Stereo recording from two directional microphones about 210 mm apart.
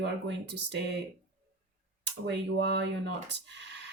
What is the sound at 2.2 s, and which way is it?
Speech, 55° right (ahead or behind).